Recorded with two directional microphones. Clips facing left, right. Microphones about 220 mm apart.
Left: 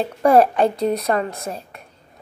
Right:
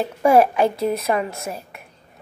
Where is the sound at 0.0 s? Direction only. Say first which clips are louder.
Left 1 dB; 5° right (ahead or behind).